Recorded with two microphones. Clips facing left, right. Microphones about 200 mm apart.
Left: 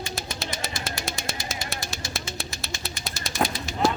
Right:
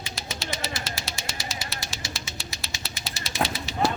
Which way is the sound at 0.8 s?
55° left (ahead or behind).